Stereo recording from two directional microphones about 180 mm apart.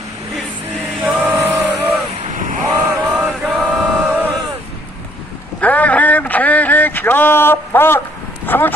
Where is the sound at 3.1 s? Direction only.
Centre (ahead or behind).